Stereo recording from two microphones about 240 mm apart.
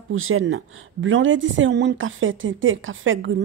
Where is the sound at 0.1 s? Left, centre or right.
Right.